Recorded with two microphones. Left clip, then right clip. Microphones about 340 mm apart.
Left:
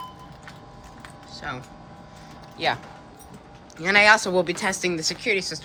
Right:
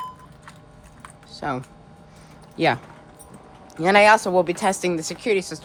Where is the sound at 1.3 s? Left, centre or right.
Centre.